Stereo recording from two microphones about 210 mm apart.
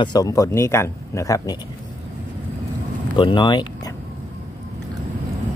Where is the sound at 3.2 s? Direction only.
20° left (ahead or behind).